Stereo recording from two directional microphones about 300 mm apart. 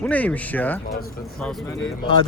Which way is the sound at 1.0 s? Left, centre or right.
Left.